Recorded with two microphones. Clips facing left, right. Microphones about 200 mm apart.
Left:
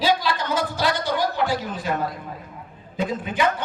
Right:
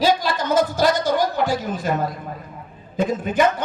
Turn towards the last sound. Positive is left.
turn(degrees=-45)  # may be behind; listen again after turning